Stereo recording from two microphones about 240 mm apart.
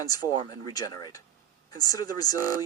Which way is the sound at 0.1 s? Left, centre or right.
Centre.